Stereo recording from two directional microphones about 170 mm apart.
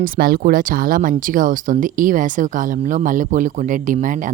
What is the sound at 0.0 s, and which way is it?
Speech, 60° right (ahead or behind).